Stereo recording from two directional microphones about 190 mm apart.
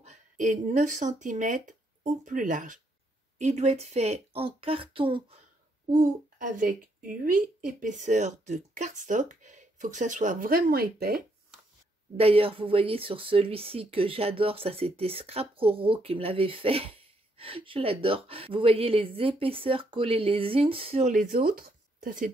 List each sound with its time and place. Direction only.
0.0 s speech: 40° right (ahead or behind)
5.9 s speech: 45° right (ahead or behind)
12.2 s speech: 30° right (ahead or behind); by 22.3 s 45° right (ahead or behind)